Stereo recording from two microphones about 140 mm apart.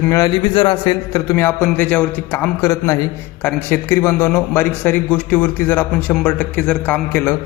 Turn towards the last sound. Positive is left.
turn(degrees=15)  # may be behind; listen again after turning